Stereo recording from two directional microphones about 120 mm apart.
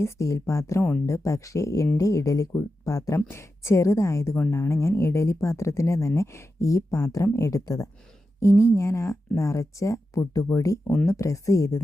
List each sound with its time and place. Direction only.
0.0 s speech: 25° left (ahead or behind)